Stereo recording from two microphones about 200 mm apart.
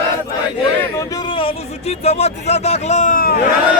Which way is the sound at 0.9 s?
20° left (ahead or behind).